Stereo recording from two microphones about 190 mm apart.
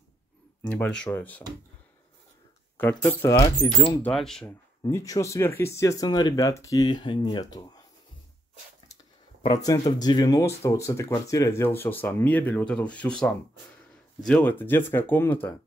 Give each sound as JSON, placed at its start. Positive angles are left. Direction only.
{"t": 0.7, "sound": "speech", "side_deg": 5}
{"t": 2.8, "sound": "speech", "side_deg": 10}
{"t": 3.3, "sound": "speech", "side_deg": 25}
{"t": 4.0, "sound": "speech", "side_deg": 0}
{"t": 4.8, "sound": "speech", "side_deg": 20}
{"t": 9.4, "sound": "speech", "side_deg": 20}